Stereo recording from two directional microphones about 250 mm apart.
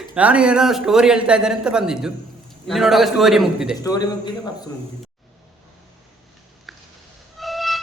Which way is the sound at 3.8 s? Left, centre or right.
Centre.